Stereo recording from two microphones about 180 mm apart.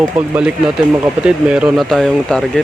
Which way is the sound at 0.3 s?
5° right (ahead or behind).